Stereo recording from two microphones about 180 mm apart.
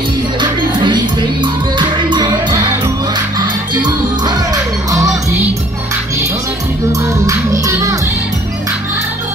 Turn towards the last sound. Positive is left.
turn(degrees=-15)  # may be behind; listen again after turning